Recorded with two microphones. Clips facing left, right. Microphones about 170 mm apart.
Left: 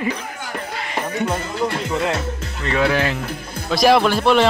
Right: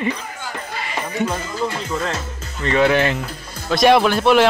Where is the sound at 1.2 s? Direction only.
65° left (ahead or behind).